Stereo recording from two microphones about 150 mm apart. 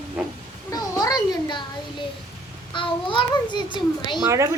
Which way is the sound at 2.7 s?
35° left (ahead or behind).